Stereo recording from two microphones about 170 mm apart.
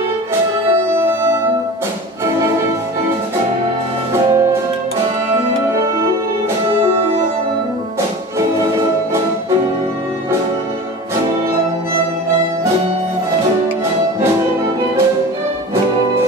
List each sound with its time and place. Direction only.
0.9 s music: 15° right (ahead or behind)
4.1 s music: 20° right (ahead or behind)